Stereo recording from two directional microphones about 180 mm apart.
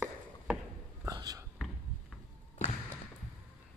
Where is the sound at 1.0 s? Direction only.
20° right (ahead or behind).